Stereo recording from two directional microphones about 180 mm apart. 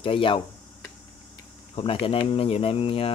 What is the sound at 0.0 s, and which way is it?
Speech, 30° left (ahead or behind).